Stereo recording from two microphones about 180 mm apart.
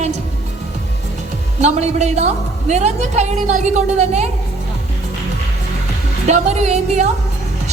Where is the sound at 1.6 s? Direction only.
40° right (ahead or behind).